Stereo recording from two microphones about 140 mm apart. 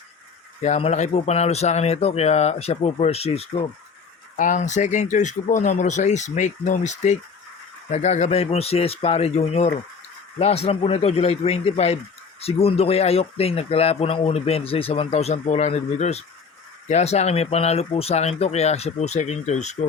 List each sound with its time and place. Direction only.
0.6 s speech: 50° left (ahead or behind)
4.4 s speech: 65° left (ahead or behind)